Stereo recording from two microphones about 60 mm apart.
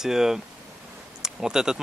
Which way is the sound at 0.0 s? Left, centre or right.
Centre.